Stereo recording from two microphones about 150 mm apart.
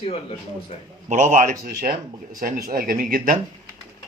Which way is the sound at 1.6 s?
80° right.